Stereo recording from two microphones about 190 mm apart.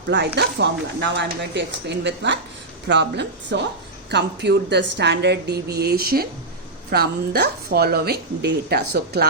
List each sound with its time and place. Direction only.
0.3 s speech: 65° right (ahead or behind)